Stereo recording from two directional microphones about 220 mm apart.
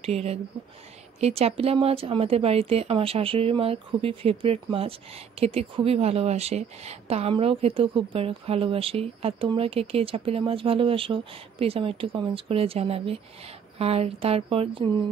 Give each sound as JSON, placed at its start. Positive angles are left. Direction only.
{"t": 0.0, "sound": "a woman's voice", "side_deg": -30}